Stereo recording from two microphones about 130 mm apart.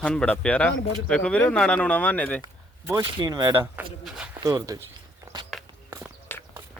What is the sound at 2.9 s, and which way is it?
Speech, 30° right (ahead or behind).